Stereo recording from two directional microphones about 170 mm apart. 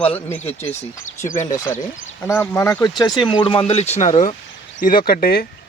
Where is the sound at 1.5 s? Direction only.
20° left (ahead or behind); by 4.4 s 40° left (ahead or behind).